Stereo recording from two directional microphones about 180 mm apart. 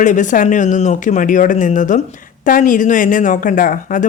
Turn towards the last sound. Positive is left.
turn(degrees=50)  # may be behind; listen again after turning